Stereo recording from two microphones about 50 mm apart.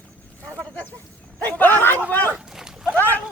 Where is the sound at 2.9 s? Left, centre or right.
Left.